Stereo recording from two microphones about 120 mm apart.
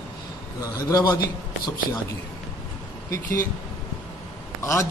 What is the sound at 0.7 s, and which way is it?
Speech, 30° left (ahead or behind).